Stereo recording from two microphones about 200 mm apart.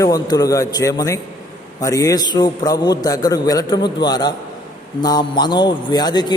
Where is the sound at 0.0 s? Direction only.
20° left (ahead or behind).